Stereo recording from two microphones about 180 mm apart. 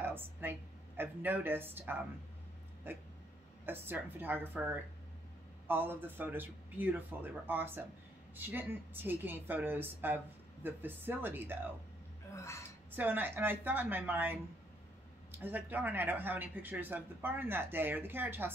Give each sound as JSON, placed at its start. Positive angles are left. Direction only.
{"t": 0.0, "sound": "a sound", "side_deg": -10}
{"t": 3.6, "sound": "speech", "side_deg": -10}
{"t": 12.4, "sound": "speech", "side_deg": 15}
{"t": 12.9, "sound": "speech", "side_deg": -10}